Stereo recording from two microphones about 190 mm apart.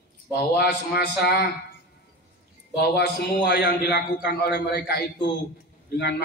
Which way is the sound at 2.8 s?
60° left (ahead or behind).